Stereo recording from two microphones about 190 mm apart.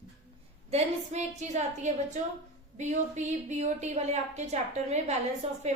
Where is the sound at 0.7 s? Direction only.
35° right (ahead or behind).